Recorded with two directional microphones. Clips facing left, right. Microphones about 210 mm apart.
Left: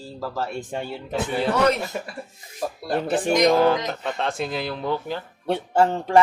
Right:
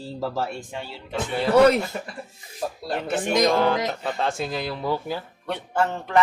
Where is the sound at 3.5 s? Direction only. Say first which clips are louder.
Left 2 dB; centre (ahead or behind).